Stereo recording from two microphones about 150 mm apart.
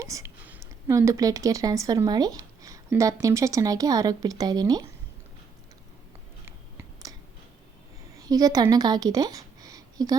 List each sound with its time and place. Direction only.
0.0 s speech: 20° right (ahead or behind)
6.4 s a sound: 20° right (ahead or behind)
8.2 s speech: 25° right (ahead or behind)